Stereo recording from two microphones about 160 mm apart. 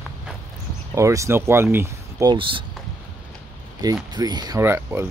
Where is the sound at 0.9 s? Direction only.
20° right (ahead or behind).